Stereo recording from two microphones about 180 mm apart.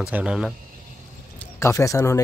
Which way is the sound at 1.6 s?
15° left (ahead or behind).